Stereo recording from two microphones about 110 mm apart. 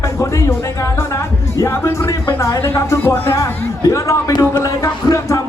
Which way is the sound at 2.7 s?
20° left (ahead or behind).